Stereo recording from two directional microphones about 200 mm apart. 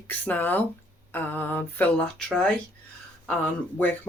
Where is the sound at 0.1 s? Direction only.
10° left (ahead or behind).